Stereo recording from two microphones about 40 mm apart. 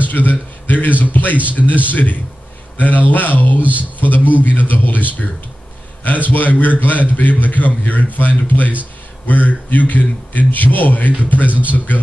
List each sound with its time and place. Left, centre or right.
0.0 s a man's voice: left
6.3 s a man's voice: left